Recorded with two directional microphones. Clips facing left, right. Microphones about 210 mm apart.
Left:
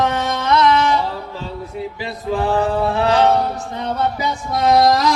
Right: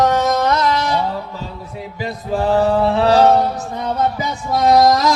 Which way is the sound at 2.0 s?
40° right (ahead or behind).